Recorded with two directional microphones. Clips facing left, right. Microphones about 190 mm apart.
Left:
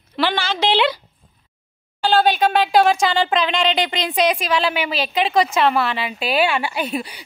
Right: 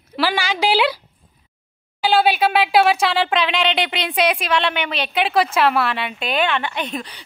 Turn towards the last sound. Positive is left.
turn(degrees=10)  # may be behind; listen again after turning